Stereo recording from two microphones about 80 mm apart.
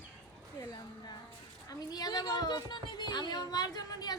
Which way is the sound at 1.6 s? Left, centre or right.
Left.